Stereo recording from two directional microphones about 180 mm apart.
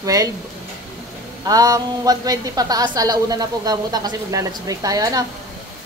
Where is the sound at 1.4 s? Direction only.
20° right (ahead or behind).